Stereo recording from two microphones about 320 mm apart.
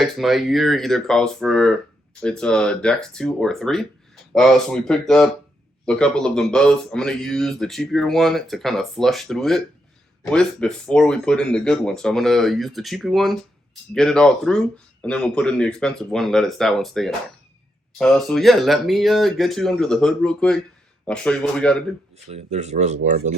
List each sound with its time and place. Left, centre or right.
0.0 s a man's voice: centre
22.1 s speech: centre